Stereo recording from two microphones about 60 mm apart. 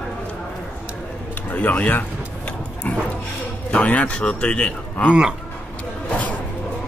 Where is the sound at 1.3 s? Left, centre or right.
Left.